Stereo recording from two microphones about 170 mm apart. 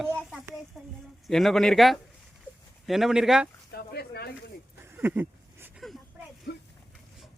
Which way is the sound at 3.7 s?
65° left (ahead or behind).